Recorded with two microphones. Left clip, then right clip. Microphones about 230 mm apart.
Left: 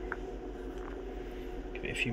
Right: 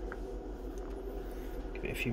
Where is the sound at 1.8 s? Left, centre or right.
Centre.